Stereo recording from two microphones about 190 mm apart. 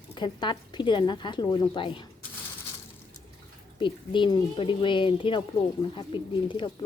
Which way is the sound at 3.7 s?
25° left (ahead or behind).